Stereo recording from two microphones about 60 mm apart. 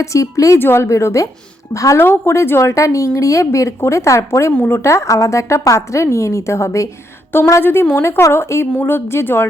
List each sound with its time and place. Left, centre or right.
0.0 s a woman's voice: left
0.6 s a woman's voice: left
0.9 s a woman's voice: left
2.0 s a woman's voice: left
7.6 s a woman's voice: left